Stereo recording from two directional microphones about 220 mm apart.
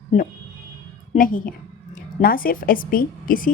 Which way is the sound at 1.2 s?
40° left (ahead or behind).